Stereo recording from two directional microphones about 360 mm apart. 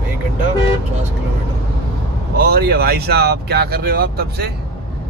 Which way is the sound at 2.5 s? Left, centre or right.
Right.